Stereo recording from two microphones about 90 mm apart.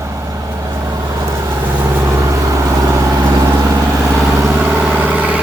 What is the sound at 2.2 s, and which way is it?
Vehicle, 40° right (ahead or behind).